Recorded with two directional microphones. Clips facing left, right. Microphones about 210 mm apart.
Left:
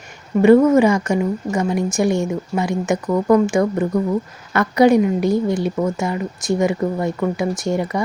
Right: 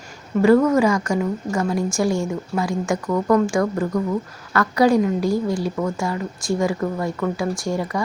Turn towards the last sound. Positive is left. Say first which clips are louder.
# left 3 dB
turn(degrees=20)  # may be behind; listen again after turning